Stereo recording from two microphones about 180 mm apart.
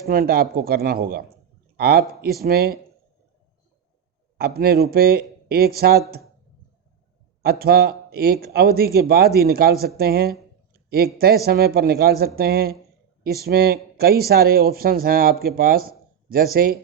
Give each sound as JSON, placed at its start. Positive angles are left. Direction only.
{"t": 0.1, "sound": "speech", "side_deg": -55}
{"t": 4.4, "sound": "speech", "side_deg": -60}
{"t": 7.6, "sound": "speech", "side_deg": -60}